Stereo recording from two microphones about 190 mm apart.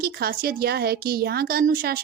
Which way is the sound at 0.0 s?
50° right (ahead or behind).